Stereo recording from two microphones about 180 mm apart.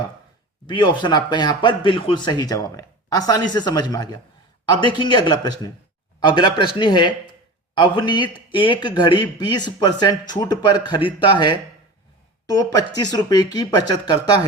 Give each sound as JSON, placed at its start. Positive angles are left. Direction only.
{"t": 0.7, "sound": "speech", "side_deg": 25}